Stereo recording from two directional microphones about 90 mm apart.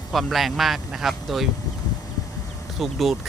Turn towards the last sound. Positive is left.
turn(degrees=0)  # may be behind; listen again after turning